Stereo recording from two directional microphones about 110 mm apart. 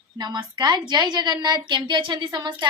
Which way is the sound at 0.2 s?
40° right (ahead or behind).